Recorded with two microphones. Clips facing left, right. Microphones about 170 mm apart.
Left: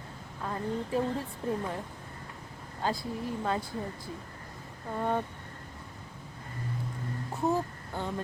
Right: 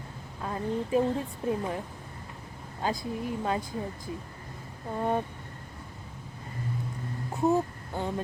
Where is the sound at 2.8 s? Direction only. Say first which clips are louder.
Right 1 dB; 15° right (ahead or behind).